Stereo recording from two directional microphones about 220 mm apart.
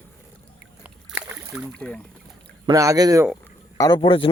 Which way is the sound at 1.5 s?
5° left (ahead or behind).